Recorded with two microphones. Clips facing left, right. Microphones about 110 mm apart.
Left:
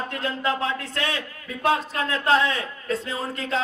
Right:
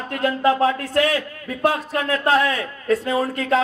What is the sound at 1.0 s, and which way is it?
A man's voice, 25° left (ahead or behind).